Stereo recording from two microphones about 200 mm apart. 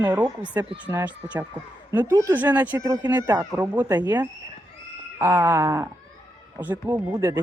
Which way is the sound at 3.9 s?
20° right (ahead or behind).